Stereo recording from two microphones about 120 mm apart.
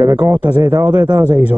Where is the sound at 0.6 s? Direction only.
30° right (ahead or behind).